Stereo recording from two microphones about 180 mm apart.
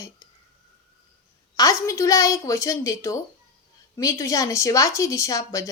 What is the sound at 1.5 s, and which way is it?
A woman's voice, 20° left (ahead or behind).